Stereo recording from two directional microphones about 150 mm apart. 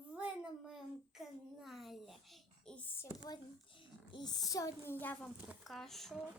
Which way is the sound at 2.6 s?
10° left (ahead or behind).